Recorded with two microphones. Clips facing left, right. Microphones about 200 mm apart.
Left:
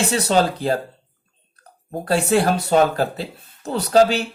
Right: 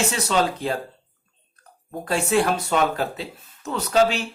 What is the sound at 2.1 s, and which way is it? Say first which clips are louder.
Speech: left 3 dB; 35° left (ahead or behind).